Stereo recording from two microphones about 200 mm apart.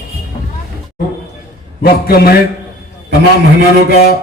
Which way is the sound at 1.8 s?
50° left (ahead or behind).